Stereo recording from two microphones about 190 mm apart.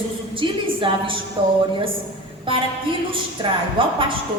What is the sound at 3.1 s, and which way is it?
Speech, 25° right (ahead or behind).